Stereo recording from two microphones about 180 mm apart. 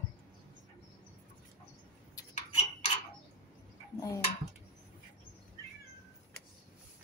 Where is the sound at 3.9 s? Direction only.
15° left (ahead or behind).